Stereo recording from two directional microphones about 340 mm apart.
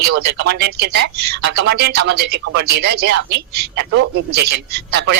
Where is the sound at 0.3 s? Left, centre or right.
Right.